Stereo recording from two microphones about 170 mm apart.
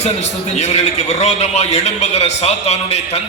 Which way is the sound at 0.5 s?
40° left (ahead or behind).